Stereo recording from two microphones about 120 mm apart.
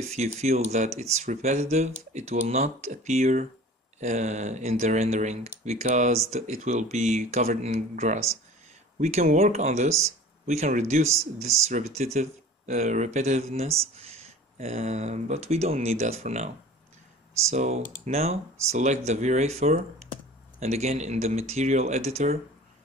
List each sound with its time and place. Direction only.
0.0 s speech: 65° right (ahead or behind)